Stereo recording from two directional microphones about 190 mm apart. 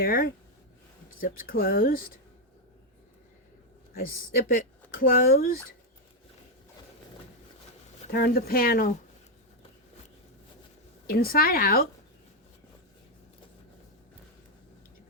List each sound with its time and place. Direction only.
0.0 s speech: 50° left (ahead or behind)
3.9 s speech: 50° left (ahead or behind)
8.1 s speech: 55° left (ahead or behind)
11.0 s speech: 50° left (ahead or behind)